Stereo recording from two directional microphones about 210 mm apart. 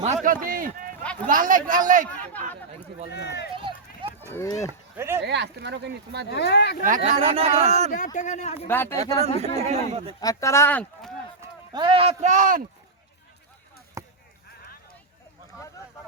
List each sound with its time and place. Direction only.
0.0 s a man's voice: 35° right (ahead or behind)
3.1 s speech: 55° left (ahead or behind)
3.5 s run: 25° right (ahead or behind)
4.4 s speech: 15° left (ahead or behind)
4.9 s speech: 10° right (ahead or behind)
5.2 s speech: 55° right (ahead or behind)
6.3 s speech: 55° left (ahead or behind)
6.8 s speech: 35° right (ahead or behind)
7.9 s speech: 40° left (ahead or behind)
8.6 s speech: 10° left (ahead or behind)
9.0 s a man's voice: 30° right (ahead or behind)
10.2 s speech: 15° left (ahead or behind)
11.3 s speech: 20° right (ahead or behind); by 12.6 s 40° right (ahead or behind)
14.0 s basketball bounce: 15° right (ahead or behind)